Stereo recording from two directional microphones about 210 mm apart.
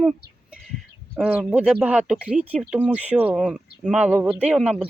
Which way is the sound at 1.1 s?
5° right (ahead or behind).